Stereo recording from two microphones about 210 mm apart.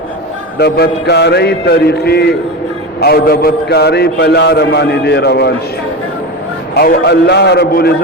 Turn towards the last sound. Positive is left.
turn(degrees=50)  # may be behind; listen again after turning